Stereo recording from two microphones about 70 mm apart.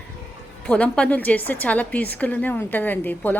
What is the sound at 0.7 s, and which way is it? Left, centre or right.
A woman's voice, centre.